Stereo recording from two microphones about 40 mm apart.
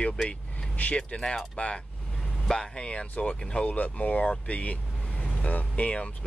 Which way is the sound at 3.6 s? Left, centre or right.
Left.